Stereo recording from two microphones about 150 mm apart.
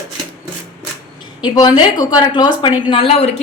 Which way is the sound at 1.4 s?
30° left (ahead or behind).